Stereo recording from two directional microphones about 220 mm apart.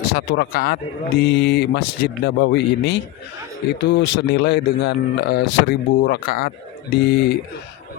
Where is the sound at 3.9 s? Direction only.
55° left (ahead or behind).